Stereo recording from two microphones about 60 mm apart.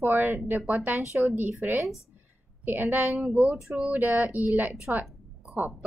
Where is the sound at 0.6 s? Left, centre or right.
Right.